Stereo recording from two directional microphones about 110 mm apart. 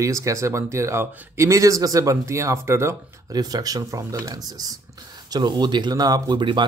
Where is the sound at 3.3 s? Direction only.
35° right (ahead or behind).